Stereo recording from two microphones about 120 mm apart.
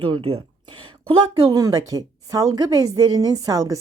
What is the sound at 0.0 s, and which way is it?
Speech, 50° right (ahead or behind).